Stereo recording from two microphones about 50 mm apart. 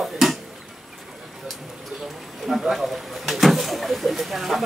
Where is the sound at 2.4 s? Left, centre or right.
Centre.